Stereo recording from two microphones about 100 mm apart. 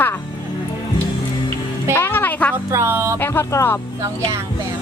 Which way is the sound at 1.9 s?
25° left (ahead or behind).